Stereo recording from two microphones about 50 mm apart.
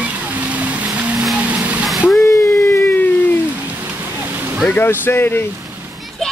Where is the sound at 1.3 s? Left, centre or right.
Right.